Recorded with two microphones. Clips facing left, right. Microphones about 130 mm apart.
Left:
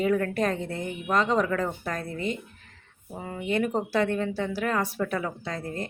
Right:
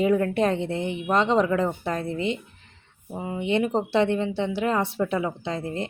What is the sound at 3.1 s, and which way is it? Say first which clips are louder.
Speech: right 4 dB; 15° right (ahead or behind).